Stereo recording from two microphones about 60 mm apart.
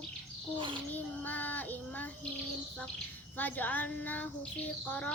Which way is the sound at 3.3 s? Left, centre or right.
Left.